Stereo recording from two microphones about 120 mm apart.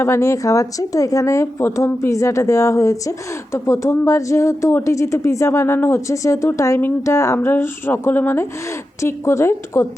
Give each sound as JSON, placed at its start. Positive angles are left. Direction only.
{"t": 0.0, "sound": "speech", "side_deg": 25}